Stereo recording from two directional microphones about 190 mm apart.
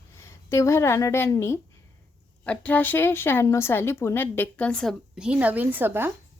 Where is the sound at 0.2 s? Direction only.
15° left (ahead or behind).